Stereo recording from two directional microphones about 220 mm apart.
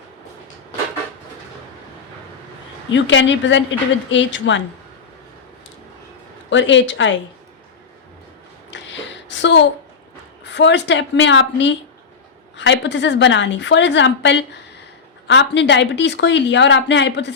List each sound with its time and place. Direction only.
2.9 s a woman's voice: 55° left (ahead or behind)
6.5 s a woman's voice: 55° left (ahead or behind)
8.7 s a sound: 55° left (ahead or behind)
10.4 s a woman's voice: 50° left (ahead or behind)